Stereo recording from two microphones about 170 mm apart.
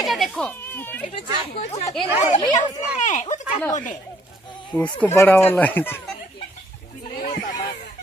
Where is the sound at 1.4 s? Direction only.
40° left (ahead or behind).